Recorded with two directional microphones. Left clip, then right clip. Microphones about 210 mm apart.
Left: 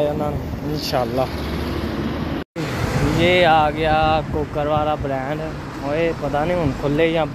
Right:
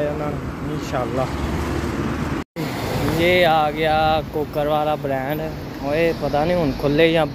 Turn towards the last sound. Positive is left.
turn(degrees=-15)  # may be behind; listen again after turning